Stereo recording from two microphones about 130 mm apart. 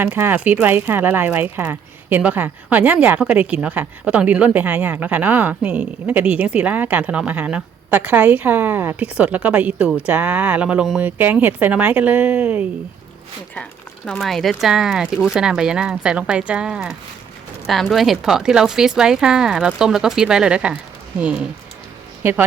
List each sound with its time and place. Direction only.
0.0 s speech: 15° right (ahead or behind)
13.6 s a woman's voice: 5° left (ahead or behind); by 22.4 s 15° right (ahead or behind)